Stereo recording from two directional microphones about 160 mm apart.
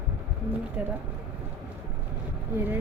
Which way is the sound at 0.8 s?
10° right (ahead or behind).